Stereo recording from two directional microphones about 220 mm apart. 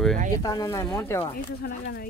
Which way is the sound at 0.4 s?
15° left (ahead or behind).